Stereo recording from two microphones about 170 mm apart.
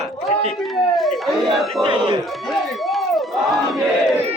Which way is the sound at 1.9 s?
30° right (ahead or behind).